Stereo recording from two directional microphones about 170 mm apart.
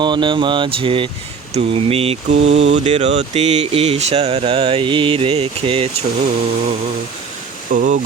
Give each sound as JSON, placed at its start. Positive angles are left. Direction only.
{"t": 0.0, "sound": "speech", "side_deg": -25}
{"t": 7.7, "sound": "speech", "side_deg": -50}